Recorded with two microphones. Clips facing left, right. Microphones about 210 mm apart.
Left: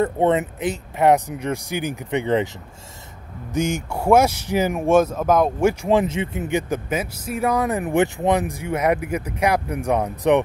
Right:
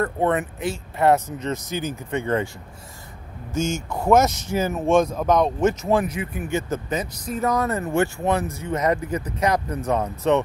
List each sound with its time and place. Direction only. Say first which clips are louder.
0.0 s speech: left 3 dB; 20° left (ahead or behind)
3.5 s speech: left 2 dB; 15° left (ahead or behind)